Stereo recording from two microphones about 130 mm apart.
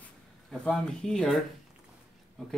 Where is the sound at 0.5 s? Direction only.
5° left (ahead or behind).